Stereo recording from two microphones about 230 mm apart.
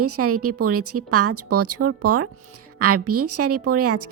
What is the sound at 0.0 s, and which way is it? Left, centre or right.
A woman's voice, right.